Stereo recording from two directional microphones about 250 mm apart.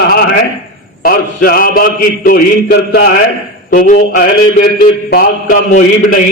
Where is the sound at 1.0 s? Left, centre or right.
Left.